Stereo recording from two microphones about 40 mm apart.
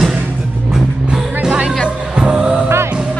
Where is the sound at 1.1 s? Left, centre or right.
Right.